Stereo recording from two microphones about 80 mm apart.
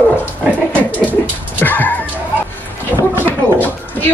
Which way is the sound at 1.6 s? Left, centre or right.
Left.